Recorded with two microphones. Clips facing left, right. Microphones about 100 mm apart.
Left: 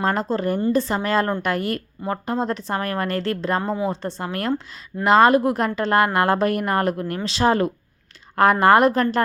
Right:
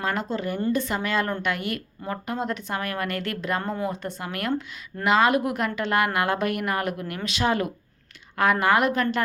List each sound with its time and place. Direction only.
0.0 s a woman's voice: 35° left (ahead or behind)